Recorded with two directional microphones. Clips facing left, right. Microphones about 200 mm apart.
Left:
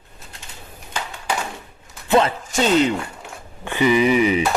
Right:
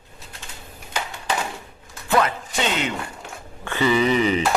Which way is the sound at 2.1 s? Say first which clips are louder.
Left 3 dB; 25° left (ahead or behind).